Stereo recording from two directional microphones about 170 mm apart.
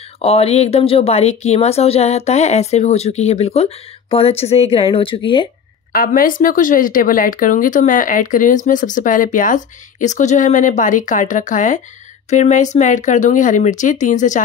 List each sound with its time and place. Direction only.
0.2 s speech: 35° left (ahead or behind)
5.9 s speech: 55° left (ahead or behind)